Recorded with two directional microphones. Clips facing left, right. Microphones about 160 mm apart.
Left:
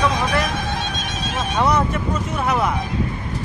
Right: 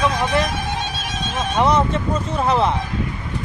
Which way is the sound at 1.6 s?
20° right (ahead or behind).